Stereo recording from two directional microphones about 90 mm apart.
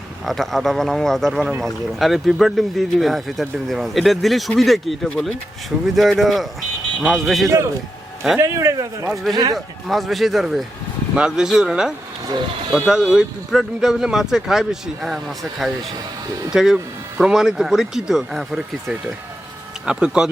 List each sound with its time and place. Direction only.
0.3 s speech: centre (ahead or behind)
8.4 s speech: 35° right (ahead or behind)
9.3 s speech: 50° right (ahead or behind)
9.8 s speech: centre (ahead or behind)